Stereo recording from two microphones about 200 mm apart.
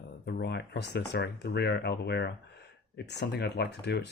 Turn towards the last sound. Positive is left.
turn(degrees=55)  # may be behind; listen again after turning